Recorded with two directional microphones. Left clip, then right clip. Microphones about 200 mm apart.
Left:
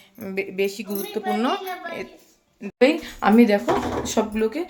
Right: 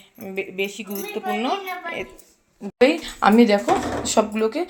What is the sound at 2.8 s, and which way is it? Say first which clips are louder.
Speech: right 2 dB; centre (ahead or behind).